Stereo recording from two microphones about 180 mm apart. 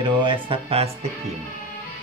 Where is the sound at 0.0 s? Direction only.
30° right (ahead or behind).